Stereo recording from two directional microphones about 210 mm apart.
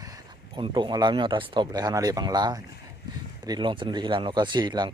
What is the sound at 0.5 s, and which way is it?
Speech, 20° right (ahead or behind).